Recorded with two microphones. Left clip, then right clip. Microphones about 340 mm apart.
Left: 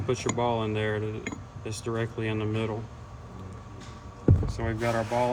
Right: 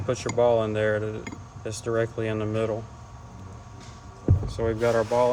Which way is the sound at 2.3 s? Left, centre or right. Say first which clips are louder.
Right 4 dB; right.